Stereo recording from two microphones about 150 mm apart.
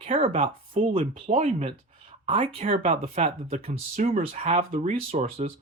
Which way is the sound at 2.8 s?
50° right (ahead or behind).